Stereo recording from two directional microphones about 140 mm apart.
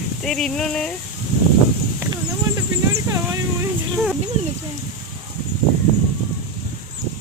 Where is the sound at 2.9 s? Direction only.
20° right (ahead or behind).